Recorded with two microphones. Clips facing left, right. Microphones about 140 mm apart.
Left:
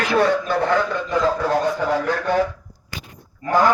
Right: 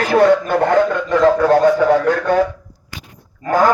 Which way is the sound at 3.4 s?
45° right (ahead or behind).